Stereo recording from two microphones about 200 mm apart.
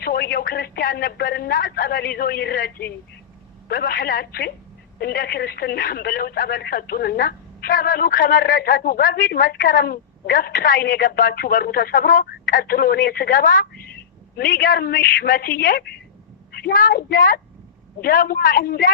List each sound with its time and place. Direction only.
0.0 s a woman's voice: 45° left (ahead or behind)